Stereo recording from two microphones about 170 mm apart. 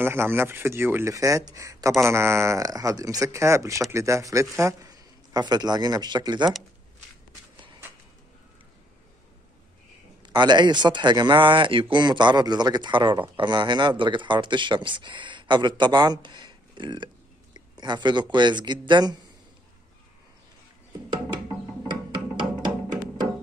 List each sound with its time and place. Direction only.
0.0 s speech: 15° right (ahead or behind)
10.2 s speech: 25° right (ahead or behind)
21.8 s music: 30° right (ahead or behind)